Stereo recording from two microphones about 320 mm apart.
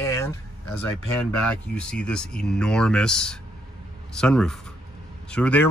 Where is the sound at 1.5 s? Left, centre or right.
Centre.